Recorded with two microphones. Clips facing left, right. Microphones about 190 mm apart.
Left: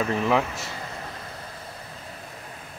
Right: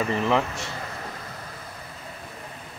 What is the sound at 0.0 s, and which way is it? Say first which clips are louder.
Speech: even; centre (ahead or behind).